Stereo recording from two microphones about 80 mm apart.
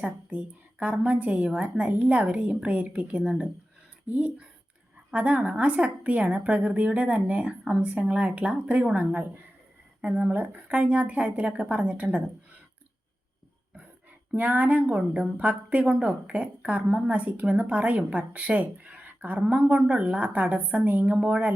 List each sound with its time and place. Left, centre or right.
0.0 s a woman's voice: centre
14.3 s a woman's voice: centre